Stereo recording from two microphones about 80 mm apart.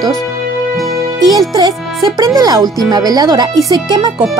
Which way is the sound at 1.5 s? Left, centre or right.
Right.